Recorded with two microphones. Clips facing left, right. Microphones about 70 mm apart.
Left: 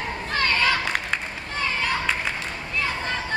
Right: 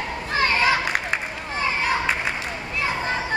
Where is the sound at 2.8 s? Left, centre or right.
Centre.